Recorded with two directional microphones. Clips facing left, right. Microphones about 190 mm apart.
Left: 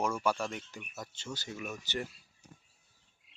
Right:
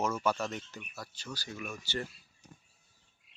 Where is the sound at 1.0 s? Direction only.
25° left (ahead or behind).